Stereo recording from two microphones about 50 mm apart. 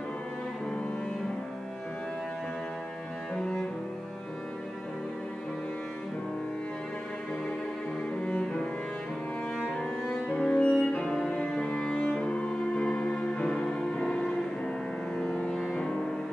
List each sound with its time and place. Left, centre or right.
3.3 s cello: centre
8.2 s cello: left
9.7 s music: centre
10.4 s music: left
15.7 s music: centre